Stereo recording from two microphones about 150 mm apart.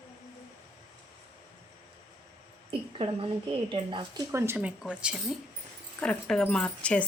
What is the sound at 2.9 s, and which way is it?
A woman's voice, 40° right (ahead or behind).